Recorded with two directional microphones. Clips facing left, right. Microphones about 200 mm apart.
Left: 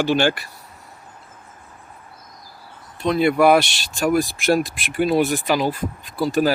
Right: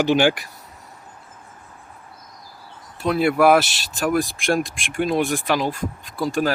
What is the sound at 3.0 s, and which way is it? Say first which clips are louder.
Speech: left 1 dB; 5° right (ahead or behind).